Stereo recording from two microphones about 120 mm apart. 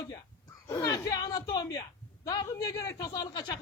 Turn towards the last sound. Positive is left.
turn(degrees=35)  # may be behind; listen again after turning